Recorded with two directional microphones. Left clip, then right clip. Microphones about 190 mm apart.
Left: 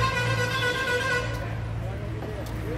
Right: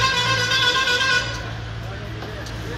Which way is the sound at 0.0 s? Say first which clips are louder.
Right 7 dB; 60° left (ahead or behind).